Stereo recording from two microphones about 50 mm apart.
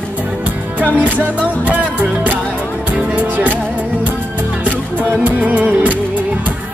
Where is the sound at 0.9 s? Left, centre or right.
Right.